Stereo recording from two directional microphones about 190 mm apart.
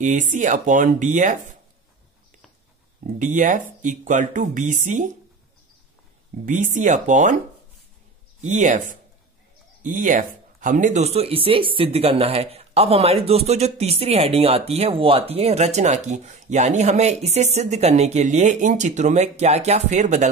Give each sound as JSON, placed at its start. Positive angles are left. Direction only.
{"t": 0.0, "sound": "speech", "side_deg": -40}
{"t": 3.2, "sound": "speech", "side_deg": -40}
{"t": 6.4, "sound": "speech", "side_deg": -40}
{"t": 8.4, "sound": "speech", "side_deg": -40}